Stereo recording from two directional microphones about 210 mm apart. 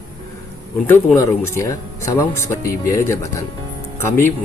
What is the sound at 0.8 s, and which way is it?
Speech, 10° left (ahead or behind).